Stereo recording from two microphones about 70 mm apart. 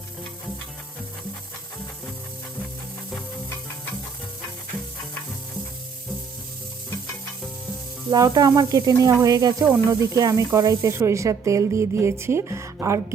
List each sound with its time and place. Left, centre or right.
8.1 s speech: right